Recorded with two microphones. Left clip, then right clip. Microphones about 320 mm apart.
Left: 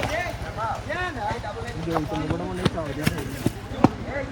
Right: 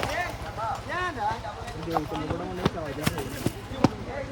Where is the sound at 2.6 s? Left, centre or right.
Centre.